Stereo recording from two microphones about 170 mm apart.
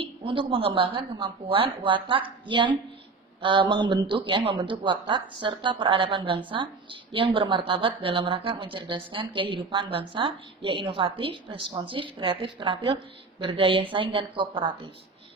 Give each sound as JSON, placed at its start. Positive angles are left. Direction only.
{"t": 0.0, "sound": "a woman's voice", "side_deg": -30}